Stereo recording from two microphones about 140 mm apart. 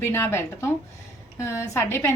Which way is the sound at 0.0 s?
20° left (ahead or behind).